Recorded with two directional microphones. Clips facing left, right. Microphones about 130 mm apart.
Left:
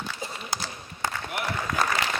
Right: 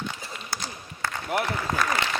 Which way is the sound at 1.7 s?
30° right (ahead or behind).